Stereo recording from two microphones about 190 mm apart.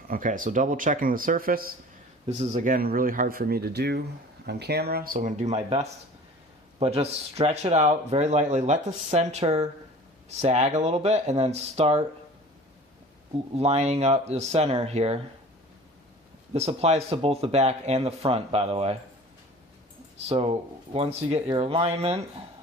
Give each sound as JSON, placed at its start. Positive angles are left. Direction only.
{"t": 0.1, "sound": "speech", "side_deg": -45}
{"t": 2.2, "sound": "speech", "side_deg": -35}
{"t": 13.6, "sound": "speech", "side_deg": -35}
{"t": 16.5, "sound": "speech", "side_deg": -35}
{"t": 20.2, "sound": "speech", "side_deg": -30}